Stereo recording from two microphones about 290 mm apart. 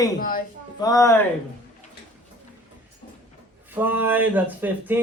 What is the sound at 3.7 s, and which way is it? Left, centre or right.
A man's voice, centre.